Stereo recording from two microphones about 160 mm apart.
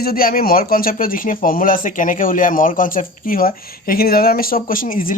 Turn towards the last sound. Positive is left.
turn(degrees=60)  # may be behind; listen again after turning